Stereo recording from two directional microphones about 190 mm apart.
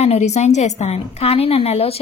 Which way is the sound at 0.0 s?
35° left (ahead or behind).